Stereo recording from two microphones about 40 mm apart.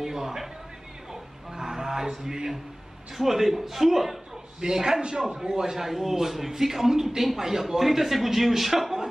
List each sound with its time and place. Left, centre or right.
0.0 s a sound: centre
1.1 s music: centre
3.2 s a man's voice: centre
4.6 s a man's voice: centre